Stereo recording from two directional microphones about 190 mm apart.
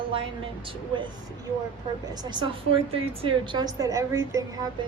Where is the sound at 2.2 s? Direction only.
25° right (ahead or behind).